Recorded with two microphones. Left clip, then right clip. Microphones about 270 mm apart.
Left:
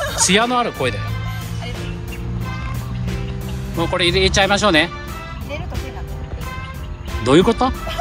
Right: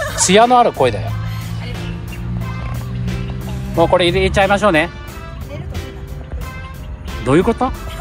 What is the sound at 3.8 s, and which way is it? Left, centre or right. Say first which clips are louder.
Speech: right 4 dB; centre.